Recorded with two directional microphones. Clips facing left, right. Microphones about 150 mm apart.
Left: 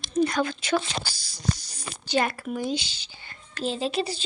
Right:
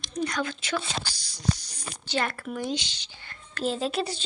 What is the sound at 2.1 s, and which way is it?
Speech, 15° left (ahead or behind).